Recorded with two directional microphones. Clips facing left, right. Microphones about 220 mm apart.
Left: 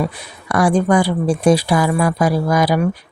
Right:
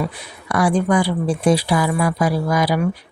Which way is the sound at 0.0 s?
45° left (ahead or behind).